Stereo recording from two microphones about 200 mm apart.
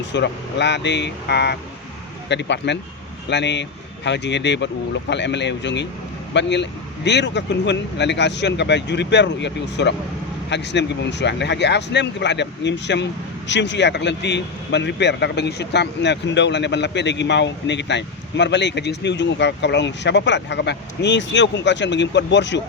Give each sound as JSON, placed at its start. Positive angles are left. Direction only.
{"t": 0.0, "sound": "speech", "side_deg": 60}